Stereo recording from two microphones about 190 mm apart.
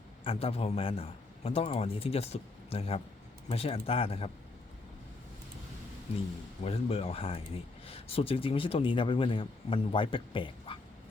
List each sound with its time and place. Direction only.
0.3 s a man's voice: 30° left (ahead or behind)
6.7 s a man's voice: 30° left (ahead or behind)